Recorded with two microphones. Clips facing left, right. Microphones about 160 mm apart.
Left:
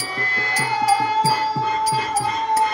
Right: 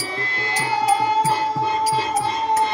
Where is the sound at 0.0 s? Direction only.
25° right (ahead or behind).